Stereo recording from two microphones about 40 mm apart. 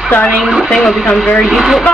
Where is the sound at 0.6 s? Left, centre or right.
Centre.